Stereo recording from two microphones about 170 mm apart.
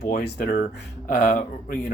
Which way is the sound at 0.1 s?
60° left (ahead or behind).